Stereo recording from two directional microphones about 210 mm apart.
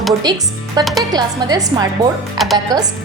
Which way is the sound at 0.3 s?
20° right (ahead or behind).